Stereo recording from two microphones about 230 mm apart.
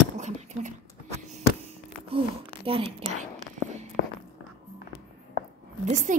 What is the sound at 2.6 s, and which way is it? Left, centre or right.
Speech, right.